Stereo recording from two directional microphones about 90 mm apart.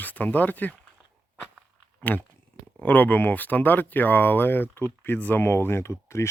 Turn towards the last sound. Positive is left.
turn(degrees=30)  # may be behind; listen again after turning